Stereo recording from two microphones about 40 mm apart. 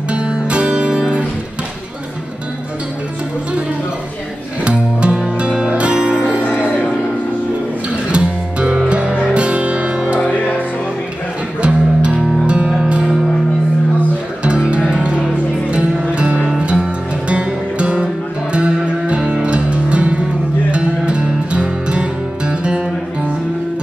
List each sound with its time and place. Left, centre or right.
0.1 s music: right
4.6 s music: right
8.1 s music: right
11.6 s music: right
14.8 s music: centre